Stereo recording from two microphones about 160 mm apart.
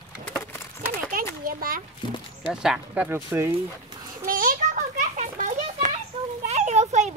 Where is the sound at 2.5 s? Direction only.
5° right (ahead or behind).